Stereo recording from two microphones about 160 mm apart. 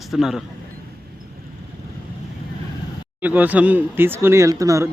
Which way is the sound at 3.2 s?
10° right (ahead or behind).